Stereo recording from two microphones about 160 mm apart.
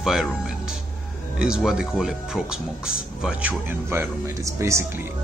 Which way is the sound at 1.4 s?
5° right (ahead or behind).